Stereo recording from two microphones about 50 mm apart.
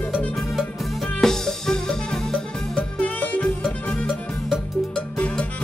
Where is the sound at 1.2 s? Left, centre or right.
Centre.